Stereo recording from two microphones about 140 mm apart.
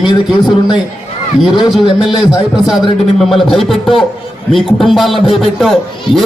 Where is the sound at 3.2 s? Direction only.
Centre (ahead or behind).